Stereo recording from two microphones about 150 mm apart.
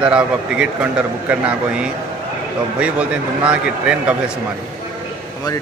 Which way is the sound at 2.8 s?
10° right (ahead or behind).